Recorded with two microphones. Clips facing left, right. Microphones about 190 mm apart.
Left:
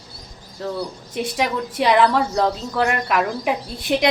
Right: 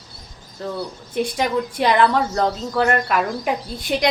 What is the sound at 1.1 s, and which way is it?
A woman's voice, centre (ahead or behind).